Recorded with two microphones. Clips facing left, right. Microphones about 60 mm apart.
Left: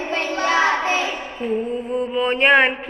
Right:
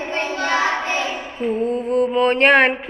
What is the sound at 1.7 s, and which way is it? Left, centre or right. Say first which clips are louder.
Mantra: right 4 dB; right.